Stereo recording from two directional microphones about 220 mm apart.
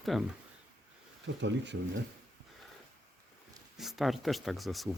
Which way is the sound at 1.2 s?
55° right (ahead or behind).